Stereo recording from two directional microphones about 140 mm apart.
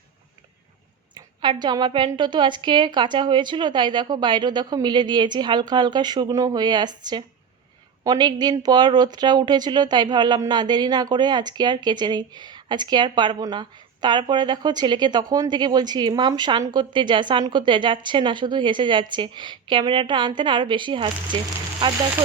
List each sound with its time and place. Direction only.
1.1 s a woman's voice: 30° right (ahead or behind)